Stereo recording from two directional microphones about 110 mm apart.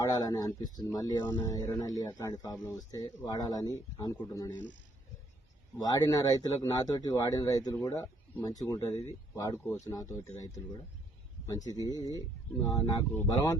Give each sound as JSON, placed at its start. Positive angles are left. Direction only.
{"t": 0.1, "sound": "speech", "side_deg": 35}
{"t": 1.4, "sound": "speech", "side_deg": 25}
{"t": 5.8, "sound": "speech", "side_deg": 35}
{"t": 12.6, "sound": "speech", "side_deg": 45}